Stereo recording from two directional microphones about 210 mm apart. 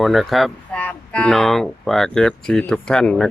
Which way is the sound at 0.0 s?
Centre (ahead or behind).